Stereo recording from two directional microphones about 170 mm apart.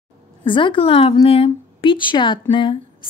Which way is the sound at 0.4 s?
30° left (ahead or behind).